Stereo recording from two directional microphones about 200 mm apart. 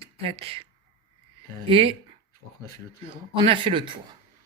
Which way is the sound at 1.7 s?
25° right (ahead or behind).